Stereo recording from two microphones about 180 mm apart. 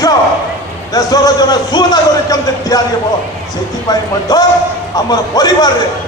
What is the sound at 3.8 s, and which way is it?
A man's voice, 20° left (ahead or behind).